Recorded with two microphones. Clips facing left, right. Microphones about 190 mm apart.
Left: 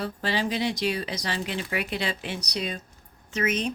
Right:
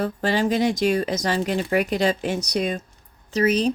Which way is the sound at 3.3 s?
35° right (ahead or behind).